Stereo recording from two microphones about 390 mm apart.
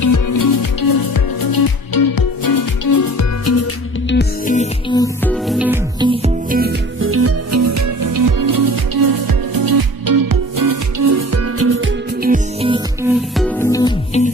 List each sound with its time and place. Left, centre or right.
0.0 s music: left
4.1 s music: left; by 13.1 s centre
13.3 s music: centre